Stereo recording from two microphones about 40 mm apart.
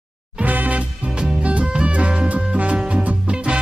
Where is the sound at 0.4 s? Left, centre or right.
Right.